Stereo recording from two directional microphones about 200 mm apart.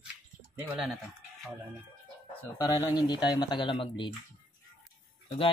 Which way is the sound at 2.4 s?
15° left (ahead or behind).